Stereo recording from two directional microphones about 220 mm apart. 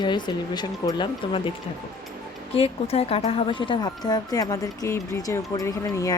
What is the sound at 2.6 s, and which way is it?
Speech, 25° left (ahead or behind).